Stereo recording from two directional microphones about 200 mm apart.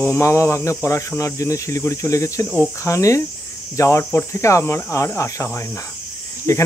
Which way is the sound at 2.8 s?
15° left (ahead or behind).